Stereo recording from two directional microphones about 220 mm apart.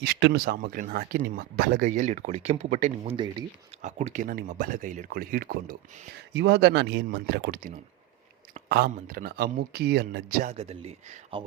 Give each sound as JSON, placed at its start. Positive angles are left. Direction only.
{"t": 0.0, "sound": "speech", "side_deg": -50}
{"t": 10.4, "sound": "speech", "side_deg": -30}